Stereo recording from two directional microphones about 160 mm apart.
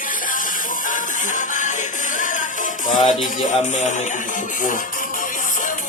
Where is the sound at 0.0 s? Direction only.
60° left (ahead or behind).